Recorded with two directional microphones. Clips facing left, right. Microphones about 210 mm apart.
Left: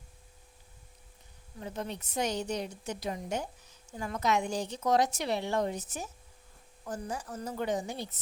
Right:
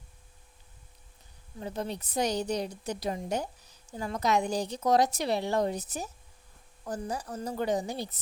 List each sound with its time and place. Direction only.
1.6 s a woman's voice: 35° right (ahead or behind)